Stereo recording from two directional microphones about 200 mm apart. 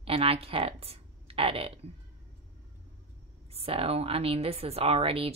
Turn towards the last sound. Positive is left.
turn(degrees=-30)  # may be behind; listen again after turning